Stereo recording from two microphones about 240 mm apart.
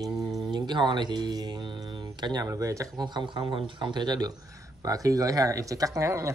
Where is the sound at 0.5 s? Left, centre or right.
Centre.